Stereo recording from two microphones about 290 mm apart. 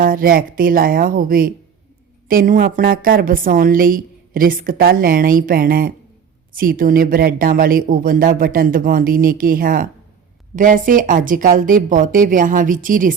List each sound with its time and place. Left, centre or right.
0.0 s a woman's voice: right